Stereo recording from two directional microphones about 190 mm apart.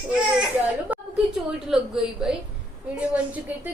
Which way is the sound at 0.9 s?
10° right (ahead or behind).